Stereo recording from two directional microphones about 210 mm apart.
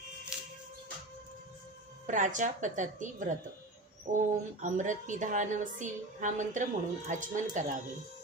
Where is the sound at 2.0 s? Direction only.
35° right (ahead or behind).